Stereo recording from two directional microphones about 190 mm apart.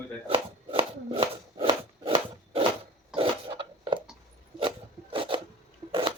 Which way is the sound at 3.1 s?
30° right (ahead or behind).